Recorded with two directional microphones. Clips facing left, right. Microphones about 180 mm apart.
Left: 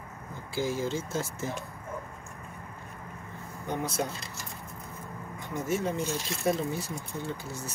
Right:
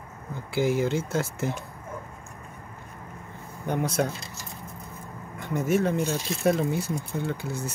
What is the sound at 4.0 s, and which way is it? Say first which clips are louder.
Speech: right 6 dB; 60° right (ahead or behind).